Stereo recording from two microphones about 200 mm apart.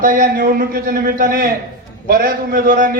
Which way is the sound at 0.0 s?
45° right (ahead or behind).